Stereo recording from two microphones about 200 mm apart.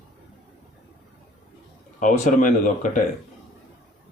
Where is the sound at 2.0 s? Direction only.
40° left (ahead or behind).